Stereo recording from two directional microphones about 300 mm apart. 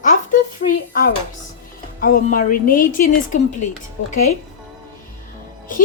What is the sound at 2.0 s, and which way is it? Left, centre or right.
A woman's voice, left.